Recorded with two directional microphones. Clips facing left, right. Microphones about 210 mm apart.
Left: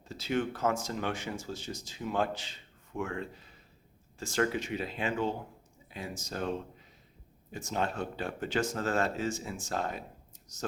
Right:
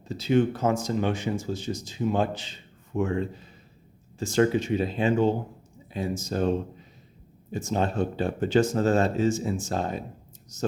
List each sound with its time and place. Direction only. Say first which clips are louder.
0.0 s speech: right 9 dB; 20° right (ahead or behind)